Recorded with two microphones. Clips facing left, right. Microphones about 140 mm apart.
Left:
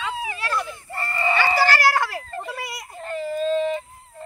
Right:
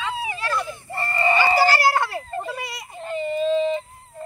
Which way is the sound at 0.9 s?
30° right (ahead or behind).